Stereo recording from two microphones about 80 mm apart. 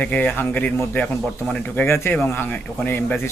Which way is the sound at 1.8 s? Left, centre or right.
Left.